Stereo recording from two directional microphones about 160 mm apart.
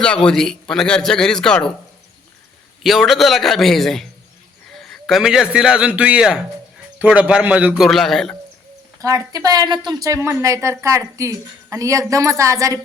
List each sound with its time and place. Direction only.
0.0 s a man's voice: 5° left (ahead or behind)
2.8 s a man's voice: centre (ahead or behind)
9.0 s a woman's voice: 20° right (ahead or behind)